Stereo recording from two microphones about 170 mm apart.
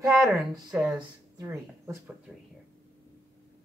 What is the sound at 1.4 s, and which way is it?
Speech, 20° right (ahead or behind).